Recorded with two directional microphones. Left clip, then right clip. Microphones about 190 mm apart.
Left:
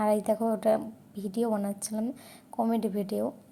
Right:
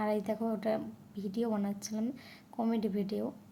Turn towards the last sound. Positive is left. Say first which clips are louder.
# left 5 dB
turn(degrees=20)  # may be behind; listen again after turning